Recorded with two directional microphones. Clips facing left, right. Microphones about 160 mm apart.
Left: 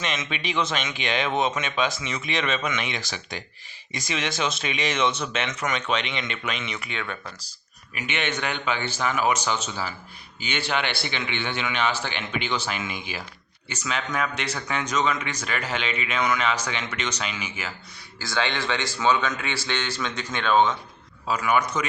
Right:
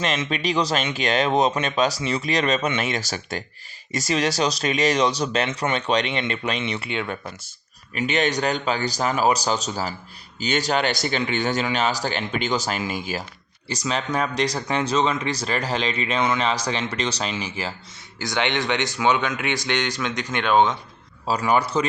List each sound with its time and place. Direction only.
0.0 s speech: 35° right (ahead or behind)
18.2 s speech: 20° right (ahead or behind)
21.2 s speech: 35° right (ahead or behind)